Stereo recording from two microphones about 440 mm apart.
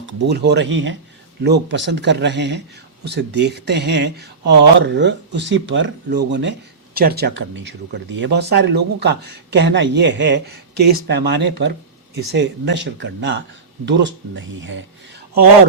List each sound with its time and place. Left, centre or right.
0.0 s speech: right